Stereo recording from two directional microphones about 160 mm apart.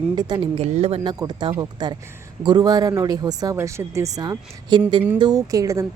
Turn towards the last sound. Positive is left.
turn(degrees=-20)  # may be behind; listen again after turning